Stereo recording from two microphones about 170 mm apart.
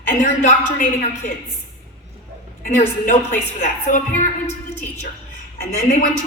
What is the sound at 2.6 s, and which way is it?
A woman's voice, 50° left (ahead or behind).